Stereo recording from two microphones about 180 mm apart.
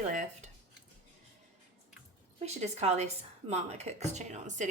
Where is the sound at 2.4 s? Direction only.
35° right (ahead or behind).